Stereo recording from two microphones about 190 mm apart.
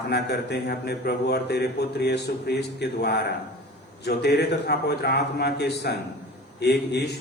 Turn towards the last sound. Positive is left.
turn(degrees=60)  # may be behind; listen again after turning